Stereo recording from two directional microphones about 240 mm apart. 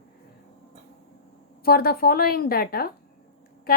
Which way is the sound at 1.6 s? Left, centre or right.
Left.